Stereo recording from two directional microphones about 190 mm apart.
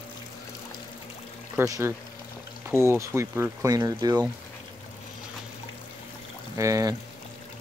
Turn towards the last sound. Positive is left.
turn(degrees=-15)  # may be behind; listen again after turning